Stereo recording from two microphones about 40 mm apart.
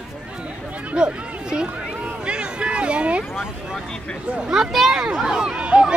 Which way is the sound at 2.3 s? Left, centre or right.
Right.